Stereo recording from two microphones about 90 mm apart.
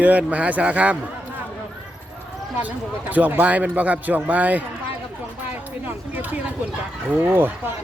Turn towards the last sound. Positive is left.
turn(degrees=-25)  # may be behind; listen again after turning